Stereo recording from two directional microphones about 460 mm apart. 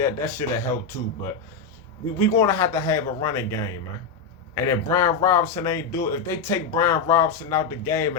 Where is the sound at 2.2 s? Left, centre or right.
Centre.